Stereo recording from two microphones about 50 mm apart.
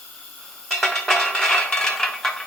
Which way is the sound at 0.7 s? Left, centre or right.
Centre.